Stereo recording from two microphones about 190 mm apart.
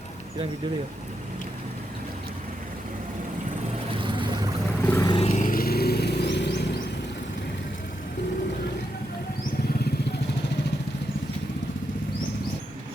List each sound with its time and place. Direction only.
3.9 s vehicle: 25° right (ahead or behind)
4.8 s vehicle: 10° left (ahead or behind)
5.3 s vehicle: 45° left (ahead or behind); by 6.7 s 65° left (ahead or behind)